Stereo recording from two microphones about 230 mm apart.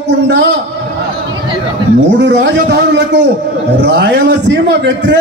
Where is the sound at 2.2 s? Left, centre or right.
Right.